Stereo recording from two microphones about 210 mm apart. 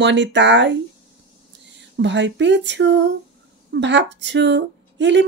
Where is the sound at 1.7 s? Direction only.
60° right (ahead or behind).